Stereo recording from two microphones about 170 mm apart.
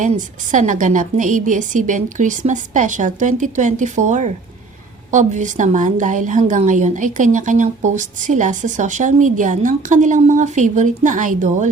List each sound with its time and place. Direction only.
0.0 s a woman's voice: 50° right (ahead or behind)